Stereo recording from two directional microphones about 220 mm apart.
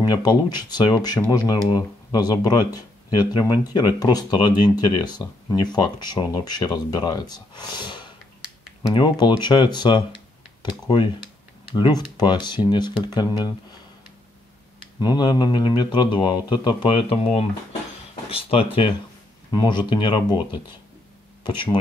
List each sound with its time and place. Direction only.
0.1 s speech: 20° left (ahead or behind)
15.0 s speech: 20° left (ahead or behind)